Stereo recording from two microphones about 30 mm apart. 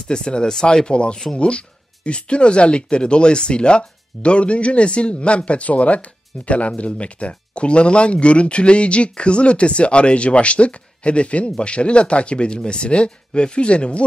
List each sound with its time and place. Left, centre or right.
0.1 s speech: left